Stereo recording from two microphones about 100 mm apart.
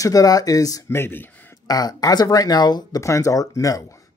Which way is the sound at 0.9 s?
20° left (ahead or behind).